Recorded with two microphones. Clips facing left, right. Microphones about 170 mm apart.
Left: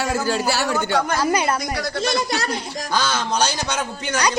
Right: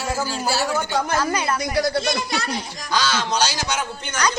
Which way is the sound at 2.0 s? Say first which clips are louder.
Left 2 dB; 45° left (ahead or behind).